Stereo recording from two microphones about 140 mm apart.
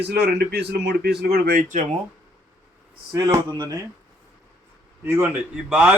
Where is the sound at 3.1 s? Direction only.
25° right (ahead or behind).